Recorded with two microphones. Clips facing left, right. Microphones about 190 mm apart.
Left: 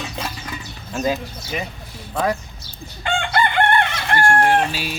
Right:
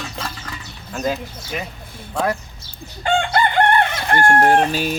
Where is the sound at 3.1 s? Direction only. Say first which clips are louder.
Right 3 dB; 40° right (ahead or behind).